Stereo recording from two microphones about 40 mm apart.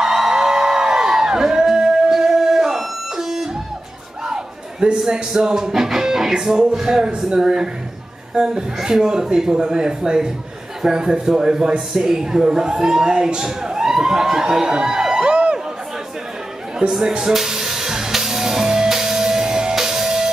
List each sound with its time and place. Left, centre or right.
0.0 s crowd: centre
4.3 s a man's voice: centre
15.2 s a sound: right
16.8 s speech: right
17.2 s music: centre